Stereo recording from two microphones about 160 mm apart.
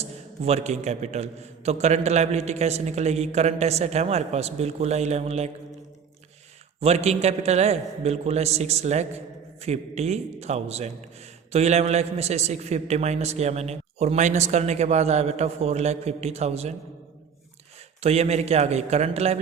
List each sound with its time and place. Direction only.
0.0 s a man's voice: 40° right (ahead or behind)
6.7 s a man's voice: 40° right (ahead or behind)
18.0 s a man's voice: 40° right (ahead or behind)